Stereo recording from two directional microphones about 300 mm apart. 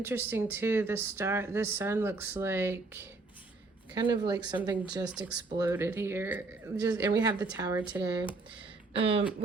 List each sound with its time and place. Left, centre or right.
0.0 s speech: centre